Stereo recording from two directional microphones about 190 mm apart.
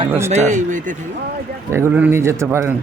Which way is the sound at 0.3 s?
40° right (ahead or behind).